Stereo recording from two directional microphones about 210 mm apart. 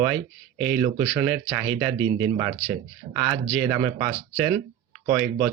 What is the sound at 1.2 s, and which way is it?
Speech, 5° right (ahead or behind).